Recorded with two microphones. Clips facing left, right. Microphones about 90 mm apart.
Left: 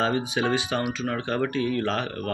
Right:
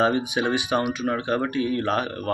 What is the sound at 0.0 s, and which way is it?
Speech, 15° right (ahead or behind).